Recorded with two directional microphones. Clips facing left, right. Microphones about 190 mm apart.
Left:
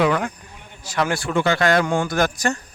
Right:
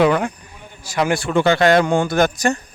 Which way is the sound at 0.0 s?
30° right (ahead or behind).